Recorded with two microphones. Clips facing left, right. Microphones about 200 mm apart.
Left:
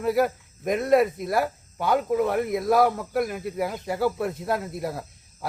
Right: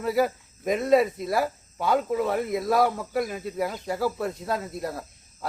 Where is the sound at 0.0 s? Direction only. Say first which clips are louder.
Left 1 dB; centre (ahead or behind).